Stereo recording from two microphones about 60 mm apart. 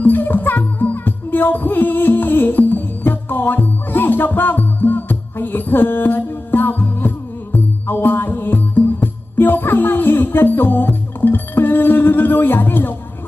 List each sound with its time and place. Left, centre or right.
0.0 s music: left